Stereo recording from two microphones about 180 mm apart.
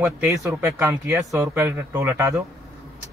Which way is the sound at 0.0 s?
15° right (ahead or behind).